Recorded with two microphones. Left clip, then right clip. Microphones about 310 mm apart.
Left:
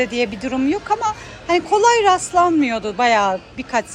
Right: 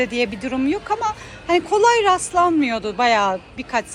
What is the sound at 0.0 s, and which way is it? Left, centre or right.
Speech, centre.